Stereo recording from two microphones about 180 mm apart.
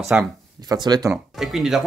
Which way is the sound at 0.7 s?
20° right (ahead or behind).